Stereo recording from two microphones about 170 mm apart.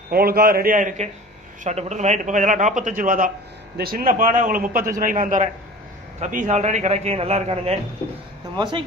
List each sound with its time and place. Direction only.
0.1 s a man's voice: 60° right (ahead or behind); by 8.8 s 30° right (ahead or behind)